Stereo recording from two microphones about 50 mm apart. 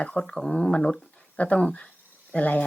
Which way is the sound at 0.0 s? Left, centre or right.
Centre.